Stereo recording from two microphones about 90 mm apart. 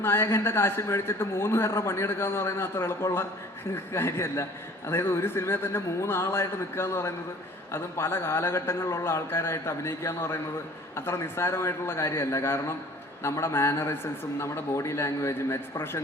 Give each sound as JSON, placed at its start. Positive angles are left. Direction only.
{"t": 0.0, "sound": "a man's voice", "side_deg": 25}